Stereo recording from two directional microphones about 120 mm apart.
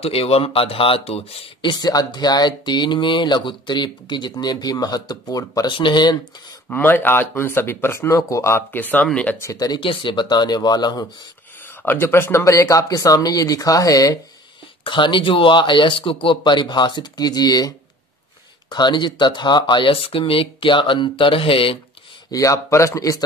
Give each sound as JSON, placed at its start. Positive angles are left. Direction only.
{"t": 0.0, "sound": "speech", "side_deg": 55}
{"t": 6.7, "sound": "speech", "side_deg": 15}
{"t": 9.4, "sound": "speech", "side_deg": 30}
{"t": 9.8, "sound": "speech", "side_deg": 45}
{"t": 11.8, "sound": "speech", "side_deg": 20}
{"t": 14.9, "sound": "speech", "side_deg": 40}
{"t": 22.3, "sound": "speech", "side_deg": 25}